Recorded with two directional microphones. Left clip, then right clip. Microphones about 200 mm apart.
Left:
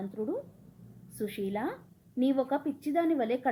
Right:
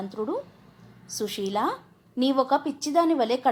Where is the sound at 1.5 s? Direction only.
60° right (ahead or behind).